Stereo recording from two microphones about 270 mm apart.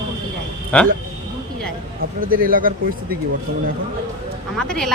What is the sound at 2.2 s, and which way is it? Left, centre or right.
Speech, right.